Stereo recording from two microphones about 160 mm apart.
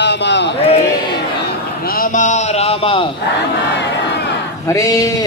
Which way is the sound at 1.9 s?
55° left (ahead or behind).